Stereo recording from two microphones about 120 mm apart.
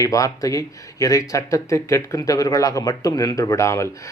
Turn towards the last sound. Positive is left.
turn(degrees=25)  # may be behind; listen again after turning